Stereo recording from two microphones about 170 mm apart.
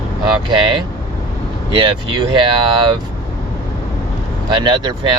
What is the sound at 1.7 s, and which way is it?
Speech, 30° right (ahead or behind).